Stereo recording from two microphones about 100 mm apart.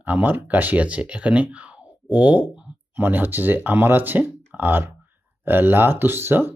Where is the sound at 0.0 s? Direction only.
15° right (ahead or behind).